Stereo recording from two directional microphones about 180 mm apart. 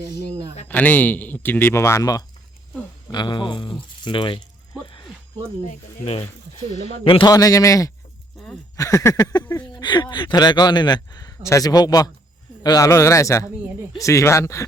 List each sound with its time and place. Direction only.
0.7 s a man's voice: 10° left (ahead or behind); by 4.4 s 25° left (ahead or behind)
5.6 s a man's voice: 35° left (ahead or behind); by 14.6 s 15° left (ahead or behind)